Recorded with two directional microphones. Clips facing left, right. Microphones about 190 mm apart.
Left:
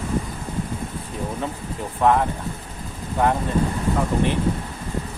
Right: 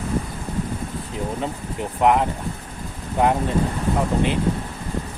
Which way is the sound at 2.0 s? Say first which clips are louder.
Even; 20° right (ahead or behind).